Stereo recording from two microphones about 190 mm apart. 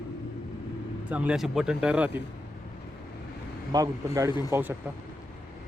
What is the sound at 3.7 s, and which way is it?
Speech, 15° right (ahead or behind).